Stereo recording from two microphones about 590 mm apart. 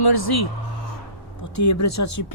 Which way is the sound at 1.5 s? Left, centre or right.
Left.